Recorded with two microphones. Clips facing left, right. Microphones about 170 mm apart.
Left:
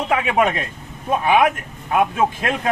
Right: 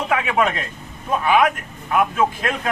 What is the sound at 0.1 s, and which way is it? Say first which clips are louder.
Speech: left 2 dB; 25° left (ahead or behind).